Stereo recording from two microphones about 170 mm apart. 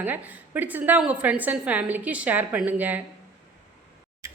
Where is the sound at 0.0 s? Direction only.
10° right (ahead or behind).